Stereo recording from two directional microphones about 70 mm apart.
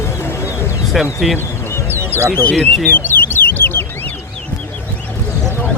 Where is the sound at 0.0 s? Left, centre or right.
Left.